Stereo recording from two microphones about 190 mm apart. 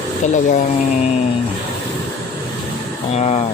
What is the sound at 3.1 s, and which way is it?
Speech, 35° left (ahead or behind).